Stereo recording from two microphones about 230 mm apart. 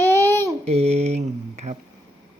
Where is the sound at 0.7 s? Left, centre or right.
Right.